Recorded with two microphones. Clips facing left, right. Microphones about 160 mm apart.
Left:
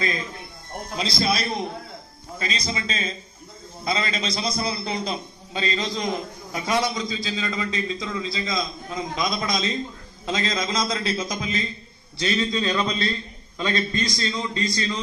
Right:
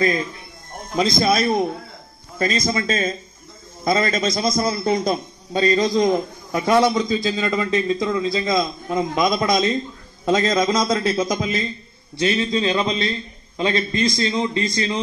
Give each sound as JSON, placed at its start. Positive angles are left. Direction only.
{"t": 0.9, "sound": "a man's voice", "side_deg": -45}
{"t": 12.3, "sound": "a man's voice", "side_deg": -25}